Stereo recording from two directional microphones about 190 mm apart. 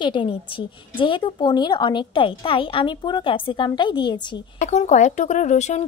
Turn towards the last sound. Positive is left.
turn(degrees=35)  # may be behind; listen again after turning